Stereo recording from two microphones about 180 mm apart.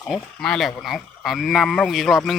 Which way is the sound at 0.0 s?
Centre (ahead or behind).